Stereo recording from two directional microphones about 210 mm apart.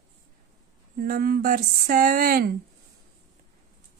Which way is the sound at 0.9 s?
45° right (ahead or behind).